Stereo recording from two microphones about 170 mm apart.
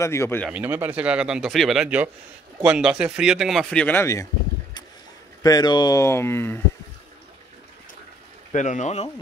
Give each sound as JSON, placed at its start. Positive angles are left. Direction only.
{"t": 0.0, "sound": "speech", "side_deg": 15}
{"t": 0.5, "sound": "speech", "side_deg": -10}
{"t": 5.4, "sound": "speech", "side_deg": 20}
{"t": 8.5, "sound": "speech", "side_deg": 45}